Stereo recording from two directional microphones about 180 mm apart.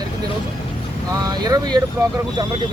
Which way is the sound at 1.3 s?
20° right (ahead or behind).